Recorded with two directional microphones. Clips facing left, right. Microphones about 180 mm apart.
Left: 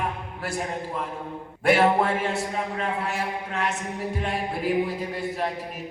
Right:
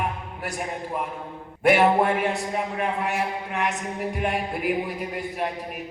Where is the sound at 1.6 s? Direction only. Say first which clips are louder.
Right 1 dB; 15° right (ahead or behind).